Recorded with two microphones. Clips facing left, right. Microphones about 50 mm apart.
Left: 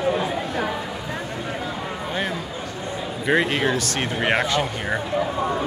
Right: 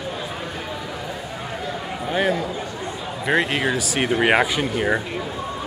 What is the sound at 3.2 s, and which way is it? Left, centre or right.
Speech, centre.